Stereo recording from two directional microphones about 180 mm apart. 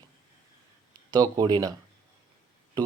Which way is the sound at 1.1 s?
25° right (ahead or behind).